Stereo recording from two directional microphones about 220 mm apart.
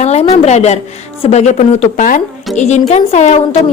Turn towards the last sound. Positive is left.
turn(degrees=30)  # may be behind; listen again after turning